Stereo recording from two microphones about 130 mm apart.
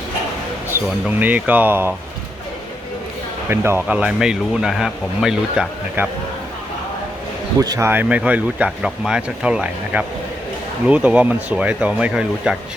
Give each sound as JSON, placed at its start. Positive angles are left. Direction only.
{"t": 0.7, "sound": "speech", "side_deg": -15}
{"t": 3.5, "sound": "speech", "side_deg": -20}
{"t": 3.8, "sound": "speech", "side_deg": -10}
{"t": 7.6, "sound": "speech", "side_deg": -30}
{"t": 7.9, "sound": "speech", "side_deg": -10}